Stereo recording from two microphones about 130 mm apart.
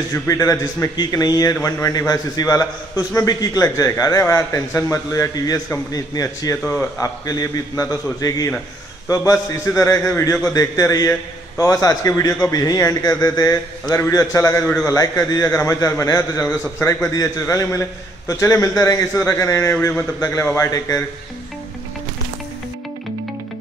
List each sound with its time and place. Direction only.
0.1 s speech: 25° left (ahead or behind)
6.6 s speech: 10° left (ahead or behind)
7.0 s speech: 25° left (ahead or behind)
14.9 s speech: 25° left (ahead or behind)